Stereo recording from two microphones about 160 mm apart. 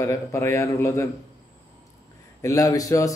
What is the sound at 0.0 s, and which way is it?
Speech, 20° left (ahead or behind).